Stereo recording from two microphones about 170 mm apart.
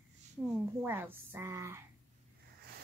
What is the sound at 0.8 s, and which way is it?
Speech, 10° right (ahead or behind).